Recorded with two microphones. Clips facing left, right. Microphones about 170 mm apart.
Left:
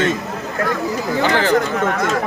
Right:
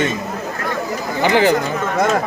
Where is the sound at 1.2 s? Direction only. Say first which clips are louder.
Right 3 dB; 15° right (ahead or behind).